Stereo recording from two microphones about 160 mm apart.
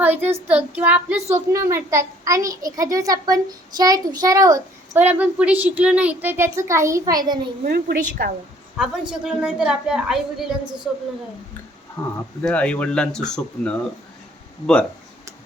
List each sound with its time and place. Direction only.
0.0 s a child's voice: 10° right (ahead or behind)
7.6 s a woman's voice: 70° right (ahead or behind)
8.8 s a woman's voice: 5° right (ahead or behind)
12.0 s speech: 20° left (ahead or behind)
12.4 s speech: 5° left (ahead or behind)